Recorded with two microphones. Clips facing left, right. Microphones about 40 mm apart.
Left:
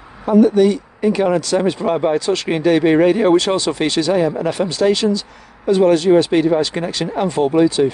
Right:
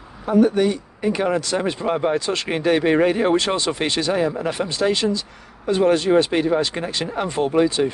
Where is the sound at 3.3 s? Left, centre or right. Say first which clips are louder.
Left 5 dB; right.